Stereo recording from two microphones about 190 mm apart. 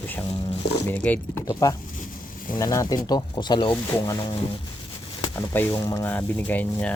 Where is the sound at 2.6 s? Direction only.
15° left (ahead or behind).